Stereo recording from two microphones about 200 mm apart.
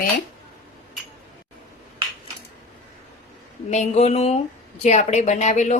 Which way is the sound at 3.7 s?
35° left (ahead or behind).